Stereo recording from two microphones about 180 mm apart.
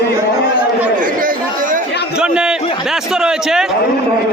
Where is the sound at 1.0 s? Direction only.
50° right (ahead or behind).